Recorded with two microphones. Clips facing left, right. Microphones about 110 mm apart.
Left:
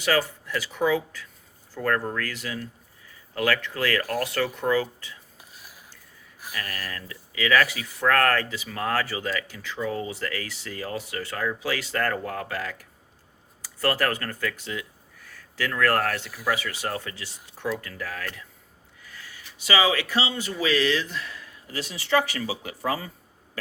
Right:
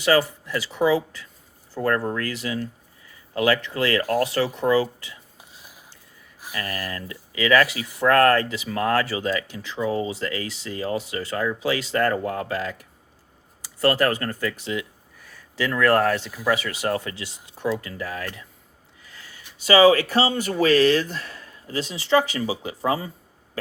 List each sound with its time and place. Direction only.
0.0 s speech: 20° right (ahead or behind)
6.5 s speech: 25° right (ahead or behind)
19.0 s a sound: 25° right (ahead or behind)
19.6 s speech: 40° right (ahead or behind); by 23.1 s 25° right (ahead or behind)